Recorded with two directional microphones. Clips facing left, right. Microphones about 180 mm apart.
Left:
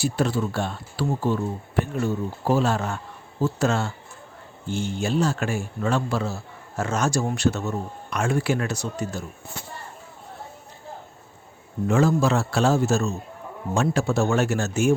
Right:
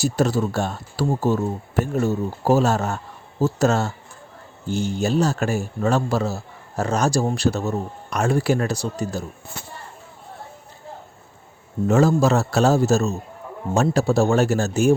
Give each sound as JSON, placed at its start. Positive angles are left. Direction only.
{"t": 0.0, "sound": "a man's voice", "side_deg": -40}
{"t": 11.9, "sound": "a man's voice", "side_deg": -40}